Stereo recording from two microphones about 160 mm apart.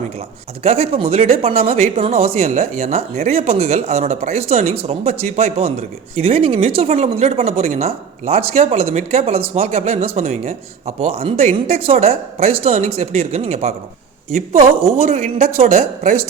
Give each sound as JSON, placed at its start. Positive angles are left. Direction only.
{"t": 0.6, "sound": "speech", "side_deg": -40}